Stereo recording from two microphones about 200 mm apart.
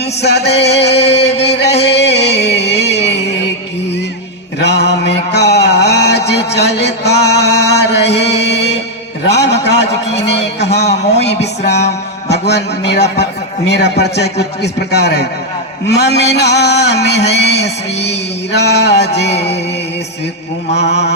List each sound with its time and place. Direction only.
0.0 s a man's voice: 55° left (ahead or behind)
1.1 s a sound: 55° left (ahead or behind)
2.3 s music: 60° left (ahead or behind)
4.6 s mantra: 60° left (ahead or behind)
6.6 s a sound: 60° left (ahead or behind)
10.2 s speech: 60° left (ahead or behind)
10.8 s a man's voice: 35° left (ahead or behind)
12.3 s a man's voice: 60° left (ahead or behind)
19.3 s a man's voice: 30° left (ahead or behind)
20.7 s a man's voice: 60° left (ahead or behind)